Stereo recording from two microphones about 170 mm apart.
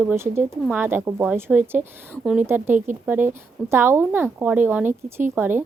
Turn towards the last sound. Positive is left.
turn(degrees=-10)  # may be behind; listen again after turning